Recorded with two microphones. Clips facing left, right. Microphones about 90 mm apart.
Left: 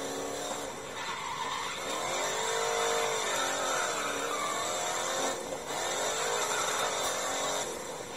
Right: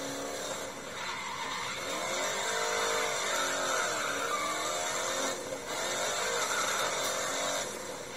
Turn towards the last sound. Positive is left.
turn(degrees=45)  # may be behind; listen again after turning